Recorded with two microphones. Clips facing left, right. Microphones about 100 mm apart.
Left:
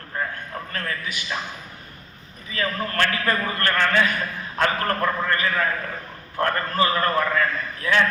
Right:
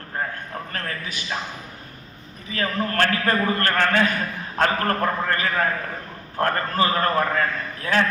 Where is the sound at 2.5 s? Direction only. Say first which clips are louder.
Right 2 dB; 35° right (ahead or behind).